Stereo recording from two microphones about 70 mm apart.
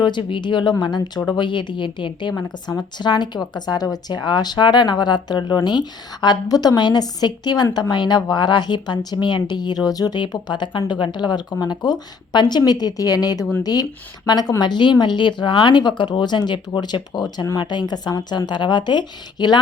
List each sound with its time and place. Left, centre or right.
0.0 s a woman's voice: left
14.6 s a woman's voice: left